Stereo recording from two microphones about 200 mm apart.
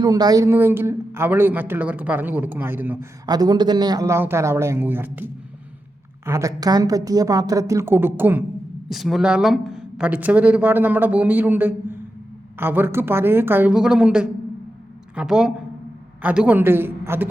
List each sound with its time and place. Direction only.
0.0 s speech: 20° right (ahead or behind)